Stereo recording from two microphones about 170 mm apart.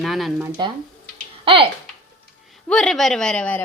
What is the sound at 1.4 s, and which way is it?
Speech, 30° right (ahead or behind).